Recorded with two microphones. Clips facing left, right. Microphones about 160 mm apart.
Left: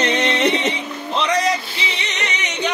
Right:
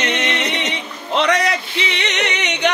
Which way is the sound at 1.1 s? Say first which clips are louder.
Right 2 dB; 70° right (ahead or behind).